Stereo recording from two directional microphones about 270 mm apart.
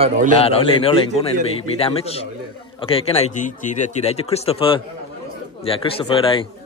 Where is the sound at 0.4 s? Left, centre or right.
Left.